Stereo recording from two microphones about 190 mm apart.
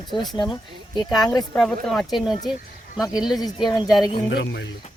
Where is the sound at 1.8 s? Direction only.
Centre (ahead or behind).